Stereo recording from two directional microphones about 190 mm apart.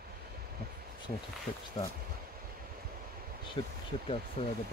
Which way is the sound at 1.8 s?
25° left (ahead or behind).